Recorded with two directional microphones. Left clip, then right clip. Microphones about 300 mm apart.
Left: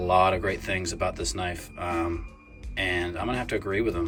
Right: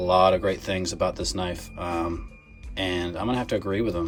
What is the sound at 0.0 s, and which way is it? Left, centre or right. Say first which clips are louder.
Speech: right 3 dB; centre.